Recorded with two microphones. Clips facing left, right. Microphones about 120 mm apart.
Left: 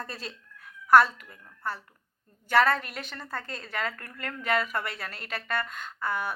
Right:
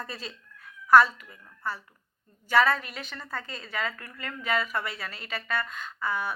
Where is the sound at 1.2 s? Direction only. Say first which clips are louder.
Even; 5° right (ahead or behind).